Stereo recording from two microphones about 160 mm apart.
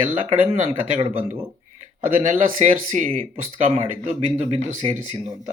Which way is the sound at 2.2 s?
50° right (ahead or behind).